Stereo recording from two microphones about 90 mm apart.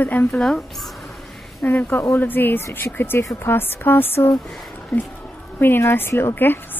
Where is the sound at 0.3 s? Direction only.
5° left (ahead or behind).